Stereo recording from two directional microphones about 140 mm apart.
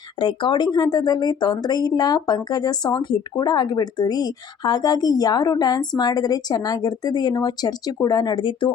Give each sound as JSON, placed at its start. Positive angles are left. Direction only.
{"t": 0.2, "sound": "speech", "side_deg": 35}